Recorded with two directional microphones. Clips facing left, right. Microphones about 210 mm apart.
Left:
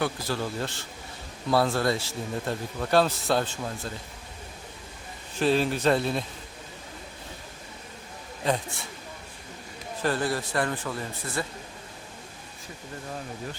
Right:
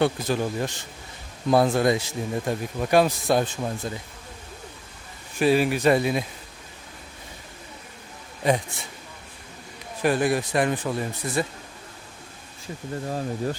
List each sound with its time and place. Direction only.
0.0 s speech: 20° right (ahead or behind)
5.4 s speech: 10° right (ahead or behind)
10.0 s speech: 15° right (ahead or behind)
13.1 s speech: 40° right (ahead or behind)